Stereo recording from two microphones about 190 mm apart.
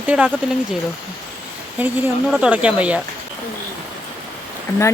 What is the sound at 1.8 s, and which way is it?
A woman's voice, 10° right (ahead or behind).